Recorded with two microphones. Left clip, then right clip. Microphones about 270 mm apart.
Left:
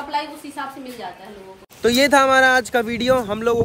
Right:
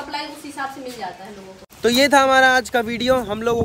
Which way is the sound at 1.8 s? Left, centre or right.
Centre.